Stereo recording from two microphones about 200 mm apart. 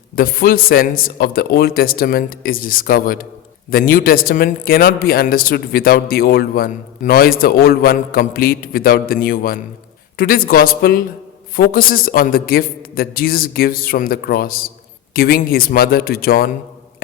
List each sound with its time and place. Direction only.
0.2 s a man's voice: 45° left (ahead or behind)